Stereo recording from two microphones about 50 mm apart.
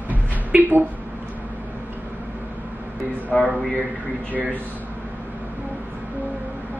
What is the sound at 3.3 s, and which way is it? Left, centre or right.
Speech, centre.